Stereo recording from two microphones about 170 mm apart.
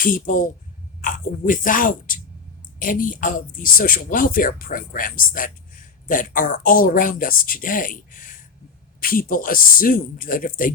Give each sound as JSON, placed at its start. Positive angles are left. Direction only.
{"t": 0.0, "sound": "speech", "side_deg": 50}